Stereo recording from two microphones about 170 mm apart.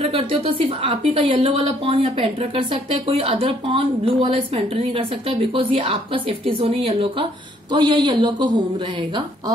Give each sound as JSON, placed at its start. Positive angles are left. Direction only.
{"t": 0.0, "sound": "speech", "side_deg": -35}